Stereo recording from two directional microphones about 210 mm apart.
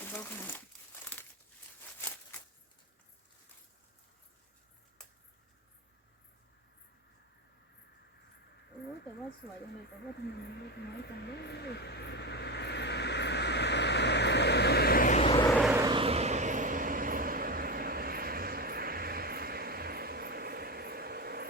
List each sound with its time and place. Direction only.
0.0 s crumpling: 10° left (ahead or behind)
2.0 s a sound: 10° left (ahead or behind)
11.0 s vehicle: 50° left (ahead or behind)
15.2 s vehicle: 25° left (ahead or behind)
15.4 s vehicle: centre (ahead or behind)
15.7 s vehicle: 20° right (ahead or behind); by 21.4 s 50° right (ahead or behind)